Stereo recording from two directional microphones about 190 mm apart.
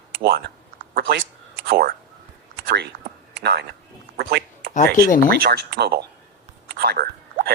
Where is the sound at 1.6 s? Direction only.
55° right (ahead or behind).